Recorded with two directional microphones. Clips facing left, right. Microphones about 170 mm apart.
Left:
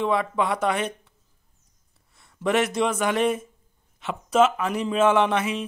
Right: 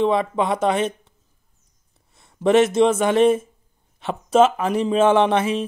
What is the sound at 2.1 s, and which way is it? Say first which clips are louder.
Speech: right 7 dB; 25° right (ahead or behind).